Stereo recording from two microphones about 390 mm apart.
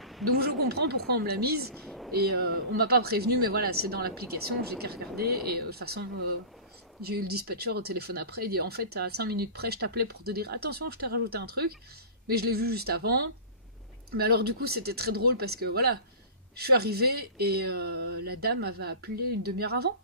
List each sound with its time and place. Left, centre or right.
0.0 s a sound: centre
0.4 s speech: right
1.7 s a woman's voice: centre
2.3 s speech: right